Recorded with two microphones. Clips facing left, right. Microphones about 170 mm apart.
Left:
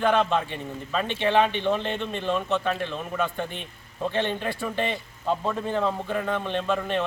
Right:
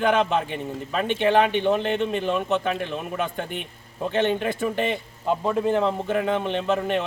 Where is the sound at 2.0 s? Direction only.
15° right (ahead or behind).